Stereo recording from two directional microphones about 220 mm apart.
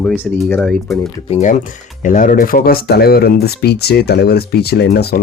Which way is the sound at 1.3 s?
35° left (ahead or behind).